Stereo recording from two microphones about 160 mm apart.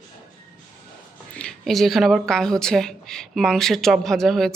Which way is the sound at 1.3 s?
5° left (ahead or behind).